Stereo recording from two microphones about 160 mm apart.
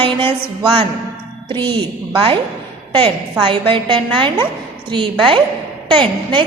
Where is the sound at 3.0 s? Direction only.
30° right (ahead or behind).